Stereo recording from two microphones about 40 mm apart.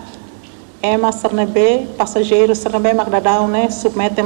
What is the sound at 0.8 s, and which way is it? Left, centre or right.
A woman's voice, centre.